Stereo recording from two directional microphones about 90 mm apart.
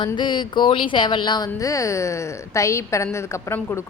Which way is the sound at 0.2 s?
60° left (ahead or behind).